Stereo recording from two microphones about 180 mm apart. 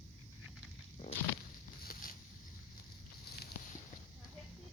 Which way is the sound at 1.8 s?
50° left (ahead or behind).